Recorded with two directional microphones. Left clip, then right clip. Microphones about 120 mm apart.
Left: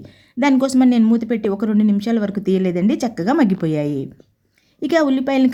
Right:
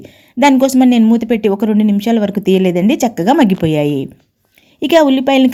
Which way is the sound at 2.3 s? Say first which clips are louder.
Right 7 dB; 40° right (ahead or behind).